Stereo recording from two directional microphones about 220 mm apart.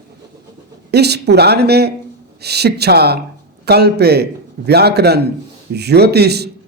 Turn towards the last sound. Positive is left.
turn(degrees=-50)  # may be behind; listen again after turning